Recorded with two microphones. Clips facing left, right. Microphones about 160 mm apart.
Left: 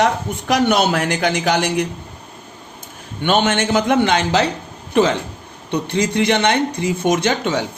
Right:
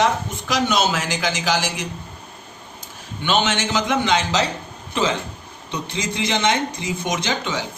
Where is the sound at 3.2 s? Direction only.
55° left (ahead or behind).